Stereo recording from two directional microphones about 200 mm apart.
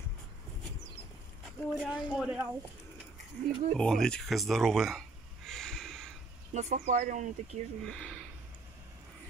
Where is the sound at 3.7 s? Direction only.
5° left (ahead or behind).